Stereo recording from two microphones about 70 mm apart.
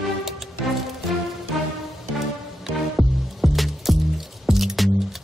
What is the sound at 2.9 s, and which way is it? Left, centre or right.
Music, centre.